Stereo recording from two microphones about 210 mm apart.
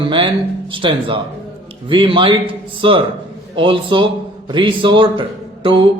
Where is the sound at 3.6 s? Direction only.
25° right (ahead or behind).